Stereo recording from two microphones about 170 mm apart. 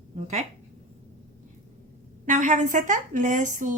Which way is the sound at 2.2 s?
45° right (ahead or behind).